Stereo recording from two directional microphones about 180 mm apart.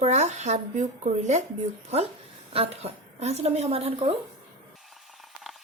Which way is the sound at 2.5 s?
35° right (ahead or behind).